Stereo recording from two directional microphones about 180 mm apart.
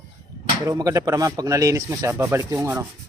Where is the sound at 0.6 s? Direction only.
20° right (ahead or behind).